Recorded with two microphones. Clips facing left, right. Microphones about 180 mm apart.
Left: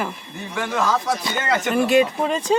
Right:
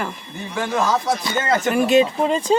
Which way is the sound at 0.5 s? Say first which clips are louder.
Right 2 dB; 25° right (ahead or behind).